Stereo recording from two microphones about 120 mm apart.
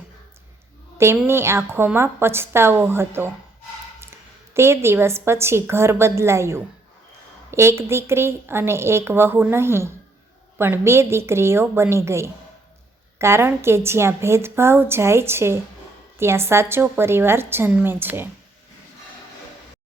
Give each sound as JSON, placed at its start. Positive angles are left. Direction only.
{"t": 0.9, "sound": "a woman's voice", "side_deg": -20}